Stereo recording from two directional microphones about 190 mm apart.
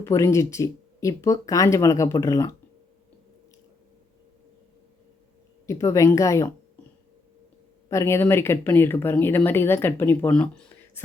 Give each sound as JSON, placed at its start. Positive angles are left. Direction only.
{"t": 0.0, "sound": "speech", "side_deg": 15}
{"t": 5.6, "sound": "speech", "side_deg": 15}
{"t": 7.9, "sound": "speech", "side_deg": 15}